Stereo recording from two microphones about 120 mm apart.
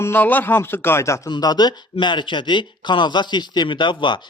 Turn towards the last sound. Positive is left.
turn(degrees=40)  # may be behind; listen again after turning